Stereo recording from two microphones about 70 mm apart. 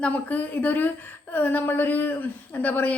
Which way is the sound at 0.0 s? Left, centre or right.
Left.